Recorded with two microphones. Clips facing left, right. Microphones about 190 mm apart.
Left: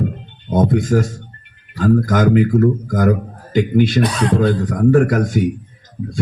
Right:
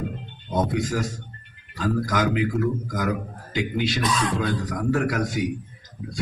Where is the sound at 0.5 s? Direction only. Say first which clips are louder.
Left 9 dB; 50° left (ahead or behind).